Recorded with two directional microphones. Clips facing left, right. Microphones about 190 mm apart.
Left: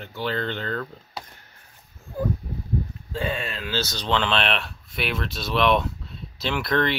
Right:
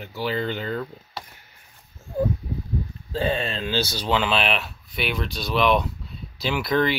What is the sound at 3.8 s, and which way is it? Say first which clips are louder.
Speech: right 1 dB; 10° right (ahead or behind).